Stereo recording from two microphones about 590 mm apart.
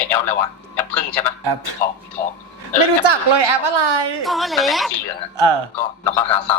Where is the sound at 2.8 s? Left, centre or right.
Right.